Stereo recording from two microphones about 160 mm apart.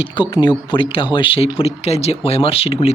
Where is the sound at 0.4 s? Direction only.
30° left (ahead or behind).